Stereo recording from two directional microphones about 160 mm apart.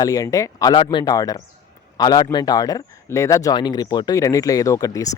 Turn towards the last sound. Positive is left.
turn(degrees=20)  # may be behind; listen again after turning